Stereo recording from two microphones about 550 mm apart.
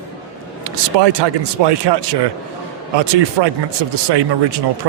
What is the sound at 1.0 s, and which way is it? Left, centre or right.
Speech, right.